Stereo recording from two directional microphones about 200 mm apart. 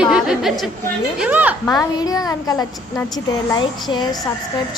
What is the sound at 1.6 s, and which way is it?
A woman's voice, 20° left (ahead or behind).